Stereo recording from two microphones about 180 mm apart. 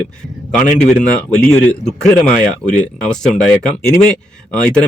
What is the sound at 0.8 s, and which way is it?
Speech, 5° left (ahead or behind).